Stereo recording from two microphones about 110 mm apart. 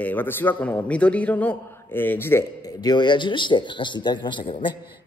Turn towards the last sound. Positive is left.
turn(degrees=50)  # may be behind; listen again after turning